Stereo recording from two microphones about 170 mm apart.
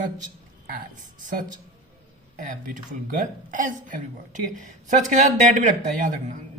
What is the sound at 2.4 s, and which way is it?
A man's voice, 50° right (ahead or behind).